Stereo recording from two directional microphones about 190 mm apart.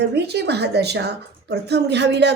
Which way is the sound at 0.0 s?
60° right (ahead or behind).